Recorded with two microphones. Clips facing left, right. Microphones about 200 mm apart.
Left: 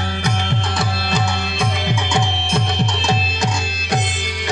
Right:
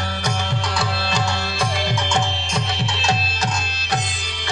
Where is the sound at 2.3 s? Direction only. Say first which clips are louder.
Left 4 dB; 60° left (ahead or behind).